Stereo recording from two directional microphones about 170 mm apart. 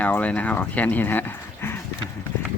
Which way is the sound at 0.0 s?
10° left (ahead or behind).